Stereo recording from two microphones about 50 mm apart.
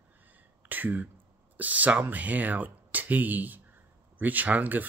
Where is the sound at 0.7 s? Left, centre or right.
Right.